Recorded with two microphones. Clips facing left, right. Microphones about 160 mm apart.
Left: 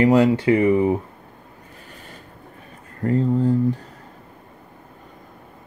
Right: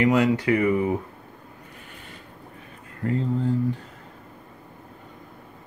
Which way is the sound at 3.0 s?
40° left (ahead or behind).